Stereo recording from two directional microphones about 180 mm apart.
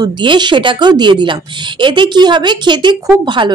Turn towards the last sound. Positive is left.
turn(degrees=-25)  # may be behind; listen again after turning